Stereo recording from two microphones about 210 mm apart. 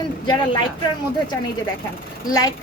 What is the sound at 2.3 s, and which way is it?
Speech, 20° left (ahead or behind).